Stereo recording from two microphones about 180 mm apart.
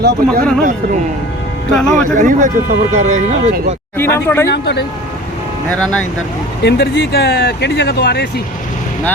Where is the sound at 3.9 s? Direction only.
15° left (ahead or behind).